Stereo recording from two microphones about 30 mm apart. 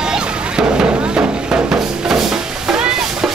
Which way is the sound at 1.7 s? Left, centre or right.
Centre.